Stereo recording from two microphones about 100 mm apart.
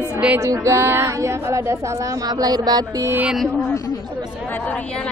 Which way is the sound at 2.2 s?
40° right (ahead or behind).